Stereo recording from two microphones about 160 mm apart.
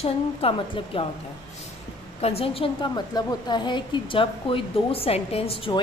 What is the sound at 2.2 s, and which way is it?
A woman's voice, 35° left (ahead or behind).